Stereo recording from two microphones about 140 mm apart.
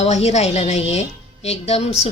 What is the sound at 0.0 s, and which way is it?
A woman's voice, 50° left (ahead or behind).